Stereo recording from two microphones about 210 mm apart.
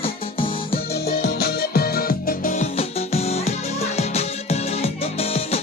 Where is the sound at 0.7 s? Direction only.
50° left (ahead or behind).